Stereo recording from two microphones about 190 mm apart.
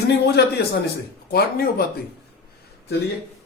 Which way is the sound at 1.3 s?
55° left (ahead or behind).